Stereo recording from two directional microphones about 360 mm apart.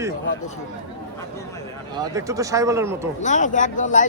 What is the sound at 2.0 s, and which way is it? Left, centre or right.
Speech, centre.